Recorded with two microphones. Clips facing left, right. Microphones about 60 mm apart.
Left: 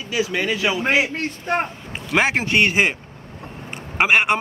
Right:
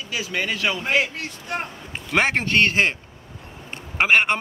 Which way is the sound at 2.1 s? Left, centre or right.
Centre.